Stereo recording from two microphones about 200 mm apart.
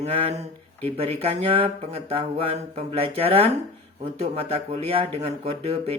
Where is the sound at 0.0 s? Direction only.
30° right (ahead or behind).